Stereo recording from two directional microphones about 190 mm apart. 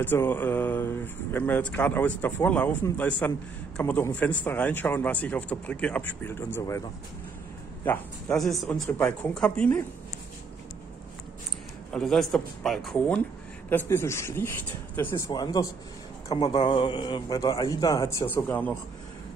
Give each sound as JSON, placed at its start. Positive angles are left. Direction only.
{"t": 0.0, "sound": "speech", "side_deg": 10}
{"t": 7.8, "sound": "speech", "side_deg": 5}
{"t": 11.9, "sound": "a man's voice", "side_deg": 0}